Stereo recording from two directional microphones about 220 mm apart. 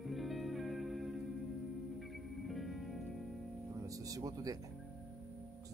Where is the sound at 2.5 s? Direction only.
Centre (ahead or behind).